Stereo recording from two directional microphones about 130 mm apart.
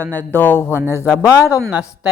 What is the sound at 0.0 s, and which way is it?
Speech, 15° left (ahead or behind).